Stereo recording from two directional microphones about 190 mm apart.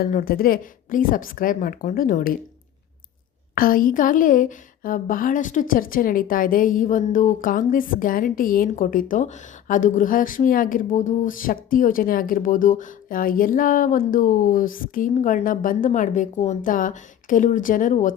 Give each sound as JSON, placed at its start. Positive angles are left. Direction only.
{"t": 0.0, "sound": "speech", "side_deg": 50}
{"t": 3.5, "sound": "speech", "side_deg": 50}